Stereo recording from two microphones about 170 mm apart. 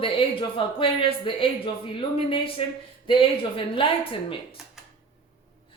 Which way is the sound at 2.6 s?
35° left (ahead or behind).